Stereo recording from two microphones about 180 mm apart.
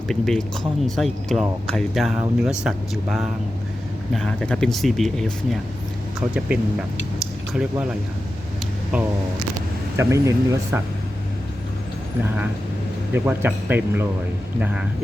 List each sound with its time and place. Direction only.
0.1 s speech: centre (ahead or behind)
10.0 s speech: 15° right (ahead or behind)
13.1 s speech: 10° right (ahead or behind)